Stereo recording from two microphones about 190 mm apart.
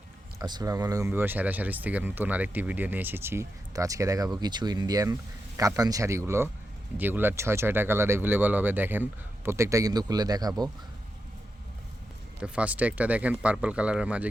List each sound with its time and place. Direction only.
0.3 s speech: 20° right (ahead or behind)
12.4 s speech: 5° right (ahead or behind)